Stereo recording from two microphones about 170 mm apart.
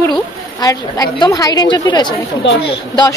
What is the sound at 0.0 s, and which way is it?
A woman's voice, 20° left (ahead or behind).